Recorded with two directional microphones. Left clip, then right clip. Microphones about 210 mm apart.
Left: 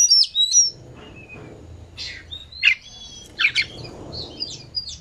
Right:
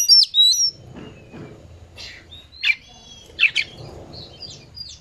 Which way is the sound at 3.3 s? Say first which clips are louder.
Right 1 dB; 15° right (ahead or behind).